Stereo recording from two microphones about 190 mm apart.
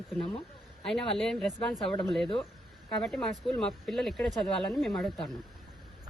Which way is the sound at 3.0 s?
5° left (ahead or behind).